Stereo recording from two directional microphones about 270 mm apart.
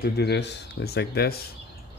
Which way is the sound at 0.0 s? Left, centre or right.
Left.